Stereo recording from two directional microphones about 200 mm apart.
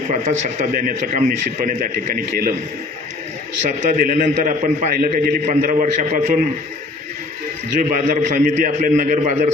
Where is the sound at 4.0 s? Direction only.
45° right (ahead or behind).